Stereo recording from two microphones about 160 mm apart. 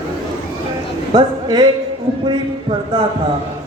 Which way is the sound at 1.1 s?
25° right (ahead or behind).